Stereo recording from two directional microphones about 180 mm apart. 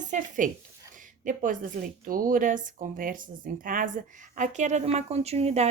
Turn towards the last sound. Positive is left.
turn(degrees=-35)  # may be behind; listen again after turning